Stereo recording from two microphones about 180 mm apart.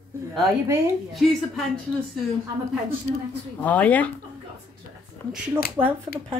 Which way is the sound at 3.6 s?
10° left (ahead or behind).